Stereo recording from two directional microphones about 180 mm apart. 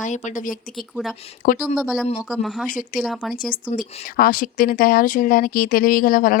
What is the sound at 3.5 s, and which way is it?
Speech, 50° left (ahead or behind).